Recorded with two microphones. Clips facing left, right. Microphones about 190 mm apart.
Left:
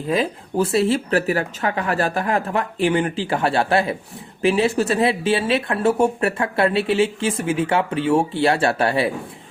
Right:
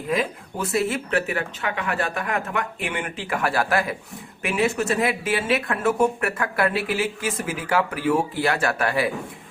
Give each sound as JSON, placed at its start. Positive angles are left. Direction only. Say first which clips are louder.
{"t": 0.1, "sound": "speech", "louder": "left 4 dB", "side_deg": 30}